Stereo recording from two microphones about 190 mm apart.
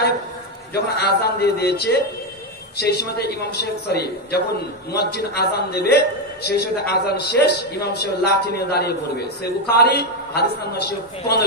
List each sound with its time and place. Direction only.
0.7 s a man's voice: 60° left (ahead or behind)